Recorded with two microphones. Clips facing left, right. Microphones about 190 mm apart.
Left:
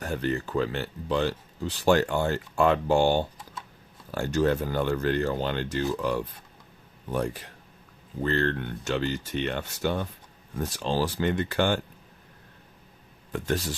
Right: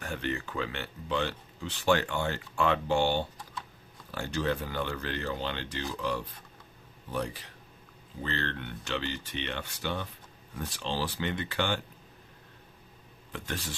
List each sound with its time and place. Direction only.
0.0 s speech: 40° left (ahead or behind)
13.3 s speech: 45° left (ahead or behind)